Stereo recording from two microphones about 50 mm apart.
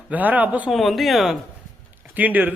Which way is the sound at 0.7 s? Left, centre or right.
Centre.